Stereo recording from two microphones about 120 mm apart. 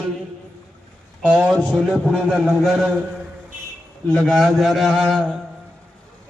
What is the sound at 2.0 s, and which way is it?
Speech, 10° left (ahead or behind).